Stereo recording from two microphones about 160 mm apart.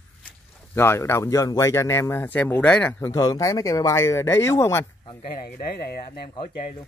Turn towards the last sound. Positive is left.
turn(degrees=70)  # may be behind; listen again after turning